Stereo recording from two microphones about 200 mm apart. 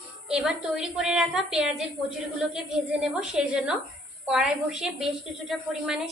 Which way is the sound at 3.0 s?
5° right (ahead or behind).